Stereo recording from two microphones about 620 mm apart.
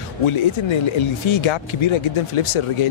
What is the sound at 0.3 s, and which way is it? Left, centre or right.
Speech, left.